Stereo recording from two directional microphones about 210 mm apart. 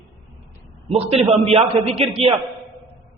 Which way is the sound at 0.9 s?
30° right (ahead or behind).